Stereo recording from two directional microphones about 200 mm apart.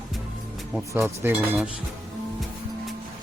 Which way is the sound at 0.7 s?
5° right (ahead or behind).